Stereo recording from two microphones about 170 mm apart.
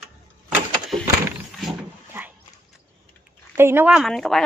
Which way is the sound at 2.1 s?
15° right (ahead or behind).